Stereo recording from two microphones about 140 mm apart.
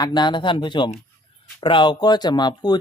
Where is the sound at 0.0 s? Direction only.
30° left (ahead or behind).